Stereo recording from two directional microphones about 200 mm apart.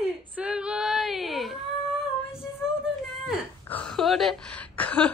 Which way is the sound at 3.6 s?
5° left (ahead or behind).